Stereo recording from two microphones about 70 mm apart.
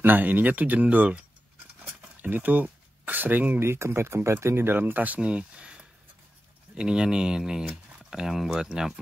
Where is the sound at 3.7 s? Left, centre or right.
Right.